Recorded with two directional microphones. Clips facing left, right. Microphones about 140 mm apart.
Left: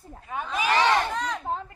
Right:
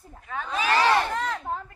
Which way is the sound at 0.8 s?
5° right (ahead or behind).